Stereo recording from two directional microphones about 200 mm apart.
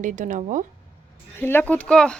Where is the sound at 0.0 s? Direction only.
40° right (ahead or behind).